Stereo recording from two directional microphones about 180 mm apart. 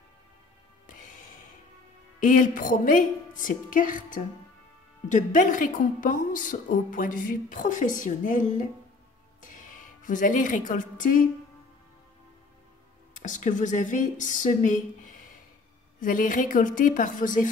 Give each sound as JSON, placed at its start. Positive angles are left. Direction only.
{"t": 2.1, "sound": "a woman's voice", "side_deg": 45}
{"t": 13.2, "sound": "a woman's voice", "side_deg": 45}